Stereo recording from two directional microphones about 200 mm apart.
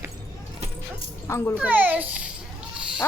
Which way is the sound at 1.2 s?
10° left (ahead or behind).